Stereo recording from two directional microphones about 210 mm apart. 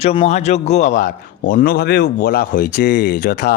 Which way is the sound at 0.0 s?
30° left (ahead or behind).